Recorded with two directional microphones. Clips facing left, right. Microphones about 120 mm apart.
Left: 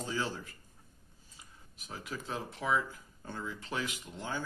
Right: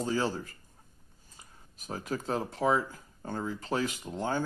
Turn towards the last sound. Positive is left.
turn(degrees=-40)  # may be behind; listen again after turning